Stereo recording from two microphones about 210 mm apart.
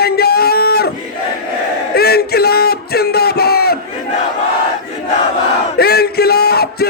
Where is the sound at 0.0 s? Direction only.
50° left (ahead or behind).